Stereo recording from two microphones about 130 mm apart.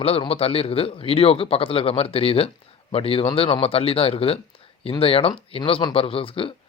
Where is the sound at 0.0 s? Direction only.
50° left (ahead or behind).